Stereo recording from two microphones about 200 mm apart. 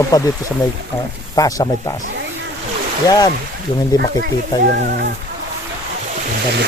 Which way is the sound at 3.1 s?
20° left (ahead or behind).